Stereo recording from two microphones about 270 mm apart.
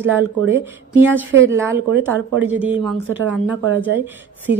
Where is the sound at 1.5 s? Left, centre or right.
Centre.